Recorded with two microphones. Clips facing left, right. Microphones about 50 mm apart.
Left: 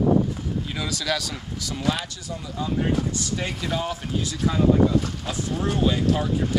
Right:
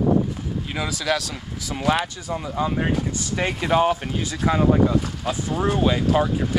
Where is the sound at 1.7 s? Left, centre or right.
Right.